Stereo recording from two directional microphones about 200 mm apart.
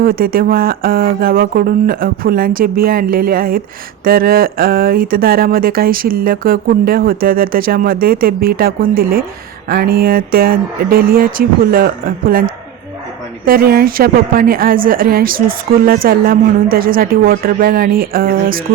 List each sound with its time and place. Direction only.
0.0 s a woman's voice: 45° right (ahead or behind)